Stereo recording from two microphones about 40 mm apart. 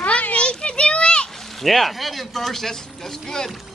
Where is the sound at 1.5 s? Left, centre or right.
Centre.